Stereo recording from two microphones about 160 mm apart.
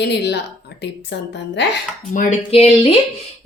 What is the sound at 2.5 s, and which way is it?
Speech, 40° left (ahead or behind).